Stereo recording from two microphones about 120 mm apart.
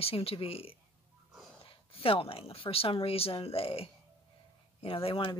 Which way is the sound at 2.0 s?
50° left (ahead or behind).